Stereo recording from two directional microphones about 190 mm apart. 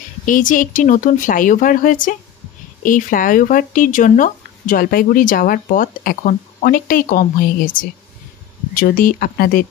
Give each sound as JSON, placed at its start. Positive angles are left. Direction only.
{"t": 0.2, "sound": "speech", "side_deg": 45}